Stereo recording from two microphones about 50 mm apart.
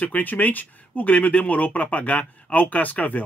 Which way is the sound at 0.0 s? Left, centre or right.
Left.